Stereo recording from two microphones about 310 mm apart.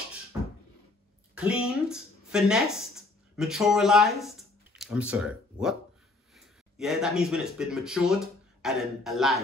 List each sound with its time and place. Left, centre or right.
1.3 s speech: centre